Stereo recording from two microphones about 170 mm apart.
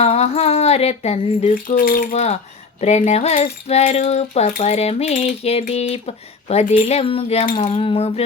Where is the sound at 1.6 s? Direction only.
55° left (ahead or behind).